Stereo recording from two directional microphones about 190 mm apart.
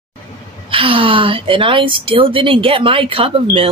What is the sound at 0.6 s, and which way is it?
A woman's voice, 25° right (ahead or behind).